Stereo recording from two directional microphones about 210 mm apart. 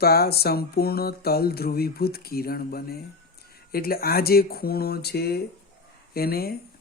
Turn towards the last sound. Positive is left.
turn(degrees=45)  # may be behind; listen again after turning